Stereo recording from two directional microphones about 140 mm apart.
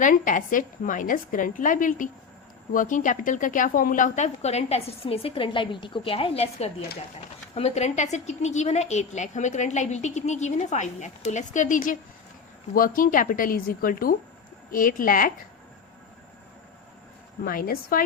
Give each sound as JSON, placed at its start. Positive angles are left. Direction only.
{"t": 0.0, "sound": "a woman's voice", "side_deg": 65}
{"t": 12.7, "sound": "speech", "side_deg": 85}
{"t": 14.7, "sound": "a woman's voice", "side_deg": 80}
{"t": 17.4, "sound": "speech", "side_deg": 90}